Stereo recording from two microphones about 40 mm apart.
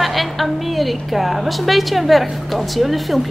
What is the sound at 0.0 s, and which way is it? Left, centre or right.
A woman's voice, centre.